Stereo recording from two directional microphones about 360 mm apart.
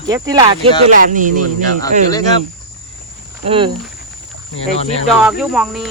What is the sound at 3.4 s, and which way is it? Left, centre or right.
Speech, centre.